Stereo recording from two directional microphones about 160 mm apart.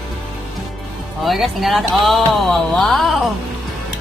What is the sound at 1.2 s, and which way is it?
Speech, centre (ahead or behind).